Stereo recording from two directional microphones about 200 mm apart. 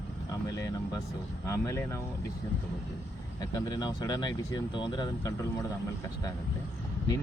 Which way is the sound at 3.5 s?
20° left (ahead or behind).